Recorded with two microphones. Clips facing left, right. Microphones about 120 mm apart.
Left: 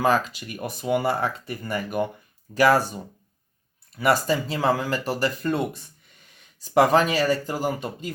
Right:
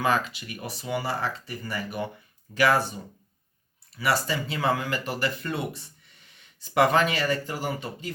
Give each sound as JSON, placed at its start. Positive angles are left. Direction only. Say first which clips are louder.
{"t": 0.0, "sound": "speech", "louder": "left 4 dB", "side_deg": 40}
{"t": 2.6, "sound": "speech", "louder": "left 4 dB", "side_deg": 40}
{"t": 3.9, "sound": "speech", "louder": "left 5 dB", "side_deg": 45}